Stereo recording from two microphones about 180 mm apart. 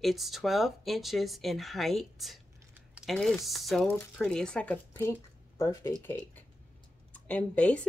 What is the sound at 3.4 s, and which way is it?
Speech, centre (ahead or behind).